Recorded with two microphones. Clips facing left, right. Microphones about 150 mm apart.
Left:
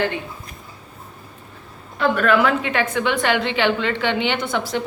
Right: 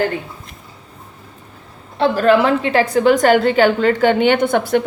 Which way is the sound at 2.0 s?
30° right (ahead or behind).